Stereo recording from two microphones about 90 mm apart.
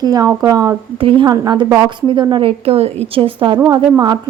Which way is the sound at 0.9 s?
90° right.